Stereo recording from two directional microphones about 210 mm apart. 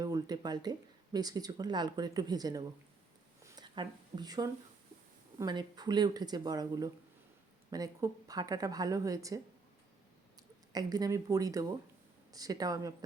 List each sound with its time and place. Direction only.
0.0 s speech: 20° right (ahead or behind)
3.4 s a sound: 20° right (ahead or behind)
5.4 s a woman's voice: 20° right (ahead or behind)
10.7 s a woman's voice: 20° right (ahead or behind)